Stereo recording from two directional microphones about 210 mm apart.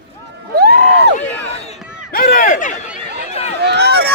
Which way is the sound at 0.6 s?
45° right (ahead or behind).